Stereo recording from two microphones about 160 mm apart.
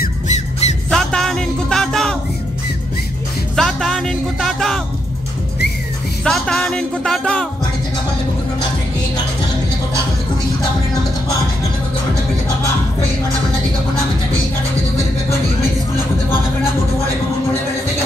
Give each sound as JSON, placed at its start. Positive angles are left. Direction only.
{"t": 0.3, "sound": "music", "side_deg": 45}
{"t": 0.8, "sound": "music", "side_deg": 5}
{"t": 3.5, "sound": "music", "side_deg": 0}
{"t": 6.2, "sound": "music", "side_deg": 5}